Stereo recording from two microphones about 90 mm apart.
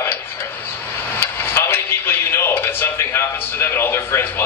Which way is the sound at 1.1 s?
25° left (ahead or behind).